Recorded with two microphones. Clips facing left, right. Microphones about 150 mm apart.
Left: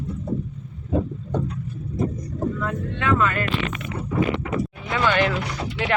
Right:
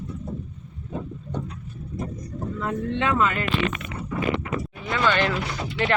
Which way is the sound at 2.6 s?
25° right (ahead or behind).